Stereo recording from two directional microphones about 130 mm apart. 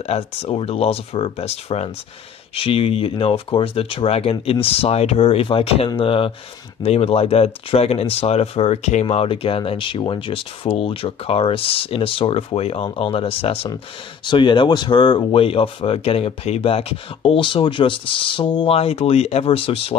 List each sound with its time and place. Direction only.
0.0 s speech: 50° left (ahead or behind)
9.0 s speech: 45° left (ahead or behind)